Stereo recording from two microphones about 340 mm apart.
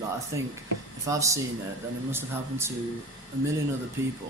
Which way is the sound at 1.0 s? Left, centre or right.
Centre.